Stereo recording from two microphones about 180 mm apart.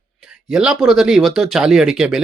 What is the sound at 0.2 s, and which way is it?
Speech, 5° right (ahead or behind).